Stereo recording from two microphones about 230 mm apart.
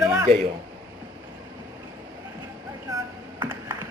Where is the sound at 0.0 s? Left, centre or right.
Centre.